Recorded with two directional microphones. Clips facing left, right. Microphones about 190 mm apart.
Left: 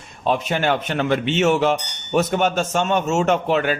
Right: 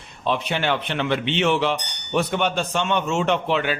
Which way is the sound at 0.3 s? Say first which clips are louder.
Left 3 dB; 45° left (ahead or behind).